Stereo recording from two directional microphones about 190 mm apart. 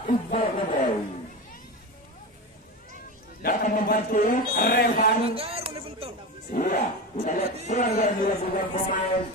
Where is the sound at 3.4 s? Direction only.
50° left (ahead or behind).